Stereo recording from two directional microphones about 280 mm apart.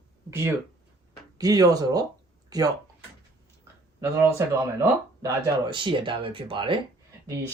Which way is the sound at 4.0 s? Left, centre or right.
Centre.